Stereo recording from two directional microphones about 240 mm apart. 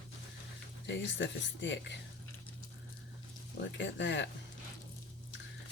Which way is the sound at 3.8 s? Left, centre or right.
Left.